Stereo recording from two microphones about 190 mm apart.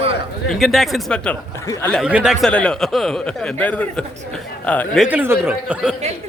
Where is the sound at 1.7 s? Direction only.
15° left (ahead or behind).